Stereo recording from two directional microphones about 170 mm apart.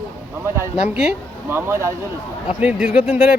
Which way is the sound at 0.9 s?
10° right (ahead or behind).